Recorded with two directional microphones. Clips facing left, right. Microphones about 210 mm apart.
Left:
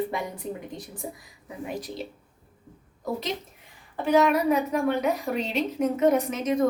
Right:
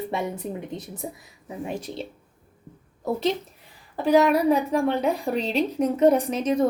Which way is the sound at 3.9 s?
35° right (ahead or behind).